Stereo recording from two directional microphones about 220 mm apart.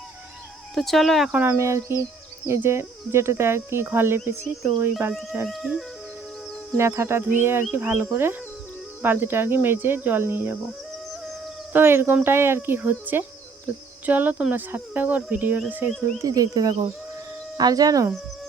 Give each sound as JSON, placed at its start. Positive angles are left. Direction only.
{"t": 0.8, "sound": "speech", "side_deg": 0}
{"t": 5.5, "sound": "music", "side_deg": 0}
{"t": 6.7, "sound": "speech", "side_deg": -10}
{"t": 11.7, "sound": "speech", "side_deg": -10}